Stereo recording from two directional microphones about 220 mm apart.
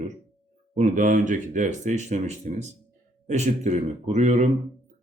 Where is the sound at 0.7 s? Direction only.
35° right (ahead or behind).